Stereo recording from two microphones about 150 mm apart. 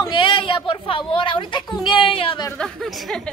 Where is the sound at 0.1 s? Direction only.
35° left (ahead or behind).